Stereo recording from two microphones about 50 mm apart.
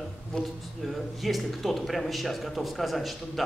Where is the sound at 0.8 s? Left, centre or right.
Centre.